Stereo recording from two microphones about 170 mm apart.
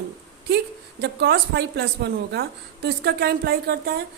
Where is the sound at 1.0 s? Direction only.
75° right (ahead or behind).